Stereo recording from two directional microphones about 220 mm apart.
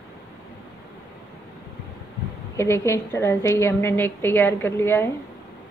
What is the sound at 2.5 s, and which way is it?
A woman's voice, 10° left (ahead or behind).